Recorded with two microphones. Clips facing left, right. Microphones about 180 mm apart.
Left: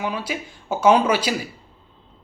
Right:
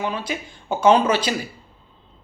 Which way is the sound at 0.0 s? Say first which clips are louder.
Even; 10° left (ahead or behind).